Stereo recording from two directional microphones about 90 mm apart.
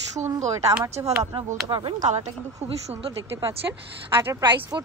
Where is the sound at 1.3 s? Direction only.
60° right (ahead or behind).